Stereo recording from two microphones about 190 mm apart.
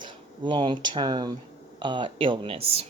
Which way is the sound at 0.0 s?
25° right (ahead or behind).